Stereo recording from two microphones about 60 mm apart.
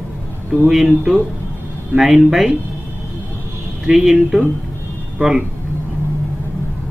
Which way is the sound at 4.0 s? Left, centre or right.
Centre.